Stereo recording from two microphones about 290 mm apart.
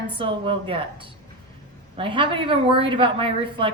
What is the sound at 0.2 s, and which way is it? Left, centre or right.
A woman's voice, centre.